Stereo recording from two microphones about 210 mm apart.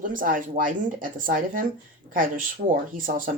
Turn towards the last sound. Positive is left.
turn(degrees=-45)  # may be behind; listen again after turning